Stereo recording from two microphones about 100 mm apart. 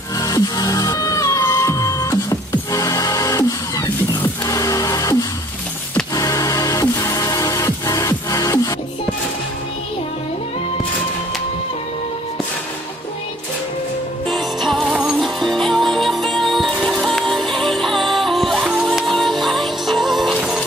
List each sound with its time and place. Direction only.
0.2 s music: 35° left (ahead or behind)
6.1 s music: 35° left (ahead or behind)
14.2 s music: centre (ahead or behind)